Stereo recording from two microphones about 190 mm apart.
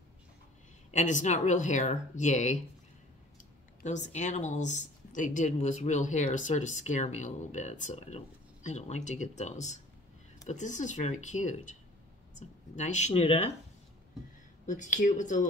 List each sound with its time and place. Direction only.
0.9 s speech: 40° left (ahead or behind)
14.7 s speech: 40° left (ahead or behind)